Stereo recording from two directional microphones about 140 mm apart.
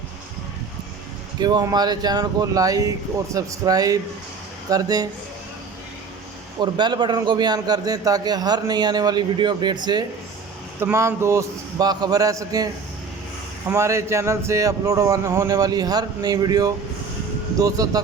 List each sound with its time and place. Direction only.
1.4 s a man's voice: 30° right (ahead or behind)
6.6 s a man's voice: 30° right (ahead or behind)
10.8 s a man's voice: 20° right (ahead or behind)
13.7 s a man's voice: 20° right (ahead or behind)